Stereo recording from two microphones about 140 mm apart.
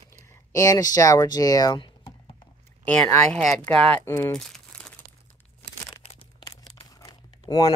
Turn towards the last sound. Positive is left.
turn(degrees=30)  # may be behind; listen again after turning